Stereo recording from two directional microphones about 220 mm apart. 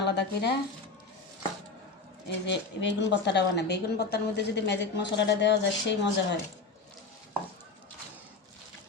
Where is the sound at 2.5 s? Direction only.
55° left (ahead or behind).